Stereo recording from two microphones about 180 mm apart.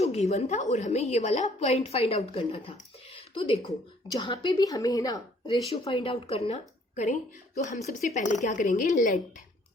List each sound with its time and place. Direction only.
0.0 s a woman's voice: 35° left (ahead or behind)